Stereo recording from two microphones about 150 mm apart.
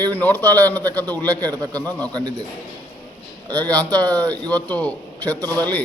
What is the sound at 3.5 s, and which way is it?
A man's voice, 10° left (ahead or behind).